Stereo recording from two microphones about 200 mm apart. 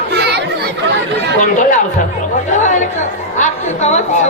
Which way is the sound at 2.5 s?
40° left (ahead or behind).